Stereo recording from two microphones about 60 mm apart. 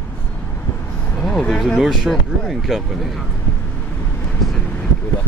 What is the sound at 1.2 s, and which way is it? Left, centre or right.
Speech, centre.